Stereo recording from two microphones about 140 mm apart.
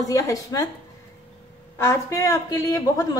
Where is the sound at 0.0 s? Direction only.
25° left (ahead or behind).